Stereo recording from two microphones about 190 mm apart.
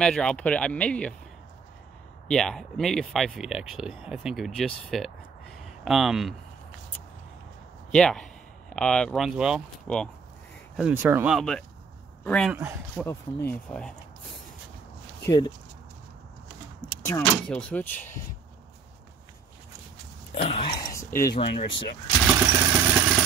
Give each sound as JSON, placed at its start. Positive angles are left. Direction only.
{"t": 0.0, "sound": "speech", "side_deg": 5}
{"t": 2.2, "sound": "speech", "side_deg": 5}
{"t": 7.9, "sound": "speech", "side_deg": 5}
{"t": 11.3, "sound": "speech", "side_deg": 5}
{"t": 15.2, "sound": "speech", "side_deg": 20}
{"t": 17.0, "sound": "speech", "side_deg": 10}
{"t": 20.3, "sound": "throat clearing", "side_deg": 35}
{"t": 21.1, "sound": "speech", "side_deg": 50}
{"t": 22.2, "sound": "vehicle", "side_deg": -15}